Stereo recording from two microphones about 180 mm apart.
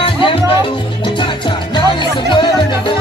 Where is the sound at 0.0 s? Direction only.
30° left (ahead or behind).